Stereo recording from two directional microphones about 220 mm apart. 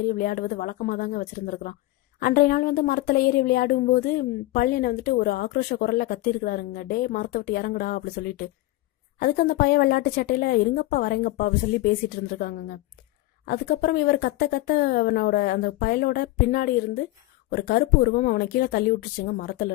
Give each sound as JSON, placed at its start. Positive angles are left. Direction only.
{"t": 0.1, "sound": "a woman's voice", "side_deg": 40}